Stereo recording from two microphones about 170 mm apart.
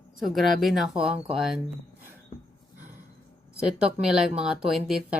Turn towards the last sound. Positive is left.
turn(degrees=-5)  # may be behind; listen again after turning